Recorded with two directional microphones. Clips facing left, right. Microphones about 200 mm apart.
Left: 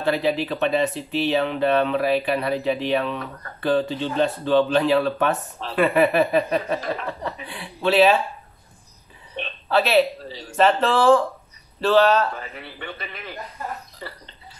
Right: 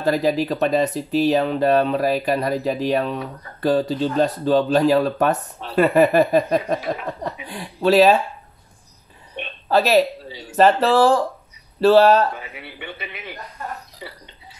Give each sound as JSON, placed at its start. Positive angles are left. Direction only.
{"t": 0.0, "sound": "speech", "side_deg": -40}
{"t": 6.8, "sound": "a man's voice", "side_deg": -10}
{"t": 7.4, "sound": "speech", "side_deg": -40}
{"t": 9.7, "sound": "speech", "side_deg": -40}
{"t": 12.4, "sound": "a man's voice", "side_deg": -5}